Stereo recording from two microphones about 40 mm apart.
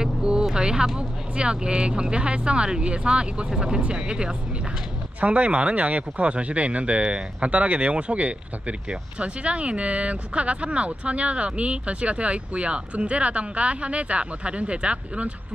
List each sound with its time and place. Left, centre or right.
0.0 s vehicle: right
0.5 s speech: centre